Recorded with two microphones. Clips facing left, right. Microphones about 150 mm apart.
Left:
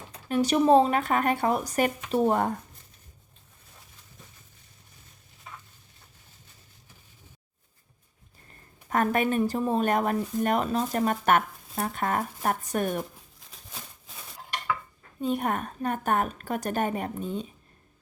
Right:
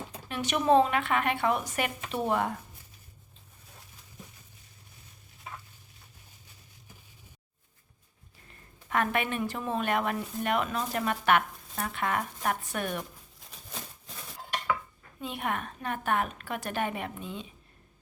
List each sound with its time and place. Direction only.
0.3 s speech: 35° left (ahead or behind)
8.9 s speech: 40° left (ahead or behind)
15.2 s speech: 40° left (ahead or behind)